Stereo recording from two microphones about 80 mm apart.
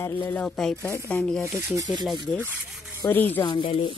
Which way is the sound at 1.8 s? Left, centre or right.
Right.